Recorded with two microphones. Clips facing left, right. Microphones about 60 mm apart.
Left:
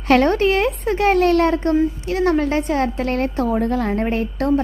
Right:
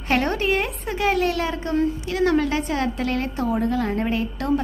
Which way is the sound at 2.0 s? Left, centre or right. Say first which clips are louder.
Left 2 dB; left.